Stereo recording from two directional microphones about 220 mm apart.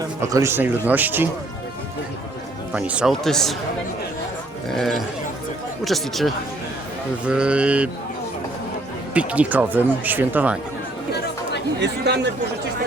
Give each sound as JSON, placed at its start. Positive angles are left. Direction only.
{"t": 0.0, "sound": "speech", "side_deg": -15}
{"t": 2.7, "sound": "speech", "side_deg": -5}
{"t": 4.7, "sound": "speech", "side_deg": 0}
{"t": 9.1, "sound": "speech", "side_deg": -5}
{"t": 11.8, "sound": "speech", "side_deg": -50}